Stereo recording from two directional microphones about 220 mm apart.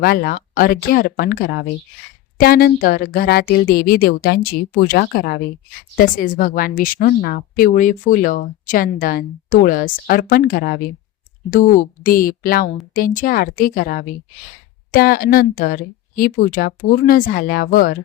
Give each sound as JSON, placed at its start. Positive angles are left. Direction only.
{"t": 0.0, "sound": "a woman's voice", "side_deg": 45}